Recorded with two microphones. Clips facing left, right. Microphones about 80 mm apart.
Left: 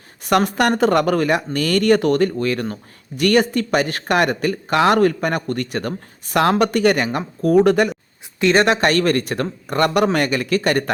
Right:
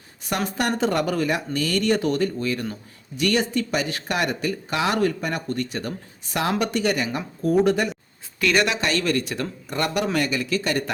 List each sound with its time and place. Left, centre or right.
0.3 s speech: left
8.4 s speech: left
8.6 s speech: left